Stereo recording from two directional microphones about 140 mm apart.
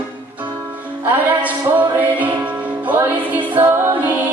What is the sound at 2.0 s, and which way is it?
Music, 10° right (ahead or behind).